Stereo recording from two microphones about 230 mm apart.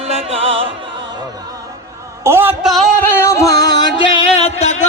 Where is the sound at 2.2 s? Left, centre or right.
Centre.